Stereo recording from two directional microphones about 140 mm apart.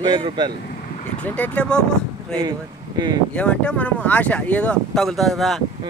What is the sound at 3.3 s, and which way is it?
Speech, 10° left (ahead or behind).